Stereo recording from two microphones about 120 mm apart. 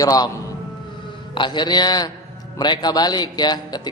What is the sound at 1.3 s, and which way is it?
Speech, 40° left (ahead or behind).